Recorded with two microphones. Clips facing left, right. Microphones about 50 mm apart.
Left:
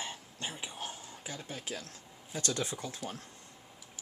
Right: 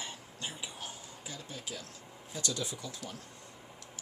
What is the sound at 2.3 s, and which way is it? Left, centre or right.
Speech, left.